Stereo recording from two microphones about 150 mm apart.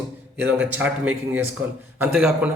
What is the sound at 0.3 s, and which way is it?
A man's voice, 15° right (ahead or behind).